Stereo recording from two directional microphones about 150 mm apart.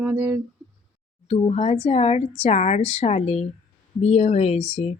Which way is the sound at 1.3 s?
45° left (ahead or behind).